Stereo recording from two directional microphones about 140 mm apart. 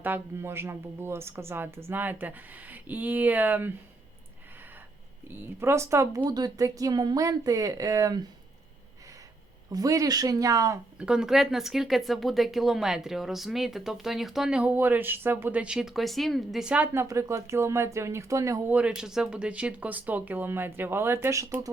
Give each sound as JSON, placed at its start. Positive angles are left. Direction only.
{"t": 0.0, "sound": "speech", "side_deg": -15}
{"t": 5.3, "sound": "speech", "side_deg": -15}
{"t": 9.6, "sound": "speech", "side_deg": -25}
{"t": 10.9, "sound": "speech", "side_deg": -5}
{"t": 18.7, "sound": "speech", "side_deg": -10}